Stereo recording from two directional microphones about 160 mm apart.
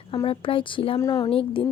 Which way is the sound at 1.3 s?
35° left (ahead or behind).